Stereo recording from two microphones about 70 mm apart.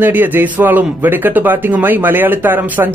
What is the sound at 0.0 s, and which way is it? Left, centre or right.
Speech, right.